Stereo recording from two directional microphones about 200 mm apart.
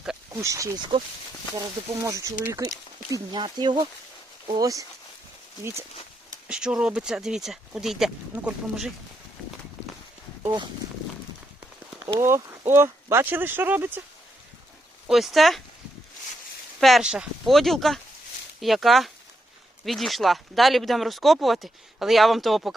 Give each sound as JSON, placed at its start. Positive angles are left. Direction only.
{"t": 0.4, "sound": "speech", "side_deg": -15}
{"t": 2.0, "sound": "speech", "side_deg": -15}
{"t": 6.5, "sound": "speech", "side_deg": -5}
{"t": 10.4, "sound": "speech", "side_deg": -20}
{"t": 12.0, "sound": "speech", "side_deg": -15}
{"t": 15.0, "sound": "speech", "side_deg": 0}
{"t": 16.8, "sound": "speech", "side_deg": 0}